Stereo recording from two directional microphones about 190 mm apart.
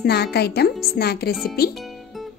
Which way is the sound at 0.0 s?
60° left (ahead or behind).